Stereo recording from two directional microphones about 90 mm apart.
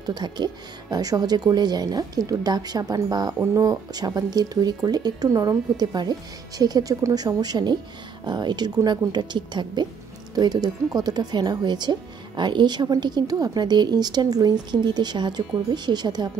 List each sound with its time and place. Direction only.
0.0 s a woman's voice: 50° right (ahead or behind)
3.3 s a woman's voice: 35° right (ahead or behind); by 16.3 s 50° right (ahead or behind)